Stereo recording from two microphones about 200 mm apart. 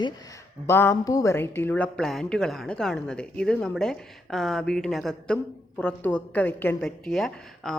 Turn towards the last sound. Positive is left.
turn(degrees=0)  # may be behind; listen again after turning